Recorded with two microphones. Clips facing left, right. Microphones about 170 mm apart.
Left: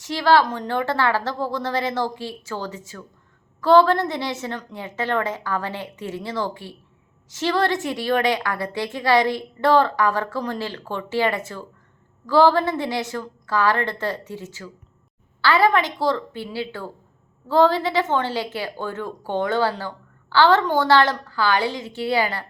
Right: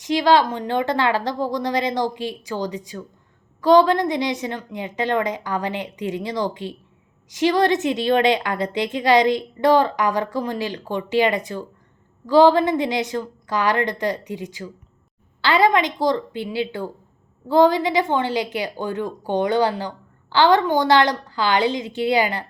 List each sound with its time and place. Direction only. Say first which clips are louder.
0.0 s a woman's voice: right 1 dB; 20° right (ahead or behind)